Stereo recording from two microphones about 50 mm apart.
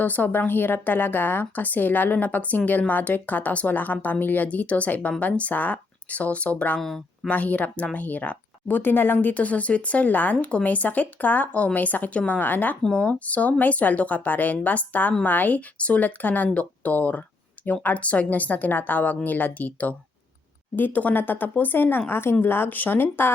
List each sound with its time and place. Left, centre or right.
0.0 s a woman's voice: left
6.7 s speech: centre
7.3 s a woman's voice: left
12.8 s speech: centre
13.1 s a woman's voice: left